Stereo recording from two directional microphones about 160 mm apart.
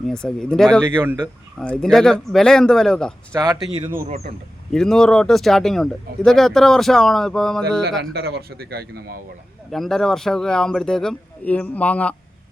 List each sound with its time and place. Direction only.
0.1 s speech: 5° left (ahead or behind)
0.9 s speech: 15° right (ahead or behind)
1.2 s speech: 5° left (ahead or behind)
3.3 s speech: 20° right (ahead or behind)
4.7 s speech: 5° left (ahead or behind)
8.1 s a man's voice: 85° right
9.7 s speech: centre (ahead or behind)